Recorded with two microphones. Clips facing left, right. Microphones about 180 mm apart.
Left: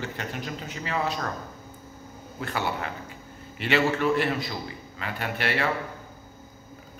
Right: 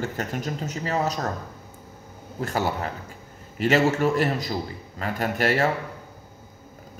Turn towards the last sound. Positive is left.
turn(degrees=-40)  # may be behind; listen again after turning